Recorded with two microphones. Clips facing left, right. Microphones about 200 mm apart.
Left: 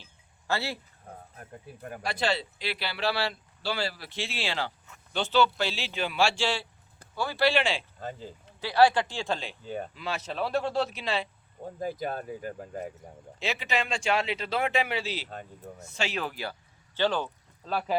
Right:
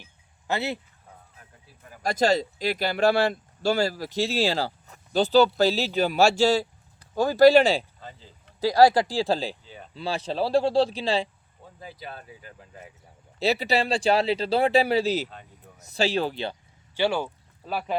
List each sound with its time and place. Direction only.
0.0 s a sound: 20° right (ahead or behind)
1.0 s speech: 55° left (ahead or behind)
2.0 s speech: 45° right (ahead or behind)
7.9 s speech: 45° left (ahead or behind)
8.6 s speech: 40° right (ahead or behind)
9.6 s speech: 50° left (ahead or behind)
9.9 s speech: 30° right (ahead or behind)
11.6 s speech: 45° left (ahead or behind)
13.4 s speech: 35° right (ahead or behind)
15.3 s speech: 45° left (ahead or behind)
15.9 s speech: 35° right (ahead or behind)
16.9 s speech: 10° right (ahead or behind)